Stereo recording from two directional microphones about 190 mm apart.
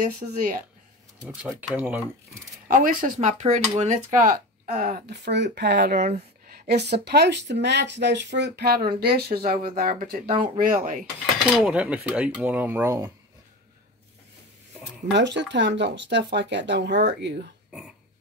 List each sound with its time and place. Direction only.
0.0 s speech: 45° right (ahead or behind)
1.4 s speech: 5° right (ahead or behind)
2.7 s speech: 45° right (ahead or behind)
6.0 s a sound: 35° right (ahead or behind)
6.7 s speech: 60° right (ahead or behind)
10.2 s speech: 30° right (ahead or behind)
10.6 s speech: 45° right (ahead or behind)
11.5 s speech: 5° right (ahead or behind)
15.1 s speech: 65° right (ahead or behind)
17.6 s a sound: 5° right (ahead or behind)